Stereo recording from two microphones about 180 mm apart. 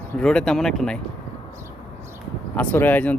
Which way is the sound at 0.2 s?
5° left (ahead or behind).